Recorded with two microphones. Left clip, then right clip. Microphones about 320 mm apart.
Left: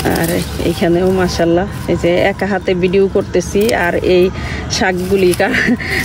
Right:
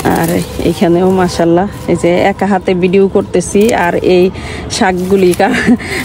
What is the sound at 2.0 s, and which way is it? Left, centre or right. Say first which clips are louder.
Speech: right 3 dB; centre.